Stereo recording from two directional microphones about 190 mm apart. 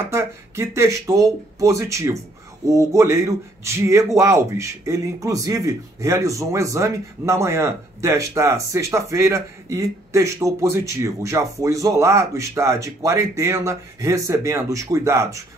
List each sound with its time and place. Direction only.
0.1 s speech: 15° right (ahead or behind)